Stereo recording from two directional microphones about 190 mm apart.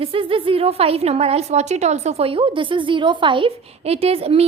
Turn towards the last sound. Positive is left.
turn(degrees=-30)  # may be behind; listen again after turning